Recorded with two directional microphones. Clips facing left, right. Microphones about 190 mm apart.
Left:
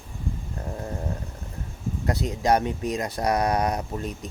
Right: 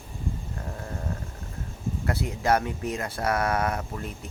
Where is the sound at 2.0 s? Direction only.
20° left (ahead or behind).